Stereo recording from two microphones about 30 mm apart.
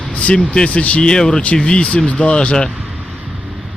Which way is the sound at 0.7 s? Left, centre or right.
Left.